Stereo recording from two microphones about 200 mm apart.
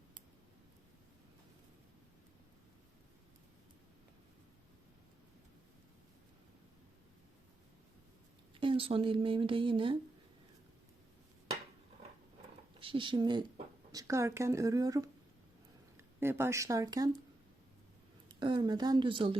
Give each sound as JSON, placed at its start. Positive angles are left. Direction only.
{"t": 8.5, "sound": "speech", "side_deg": -25}
{"t": 12.8, "sound": "a woman's voice", "side_deg": -25}
{"t": 16.2, "sound": "a woman's voice", "side_deg": -10}
{"t": 18.3, "sound": "speech", "side_deg": -25}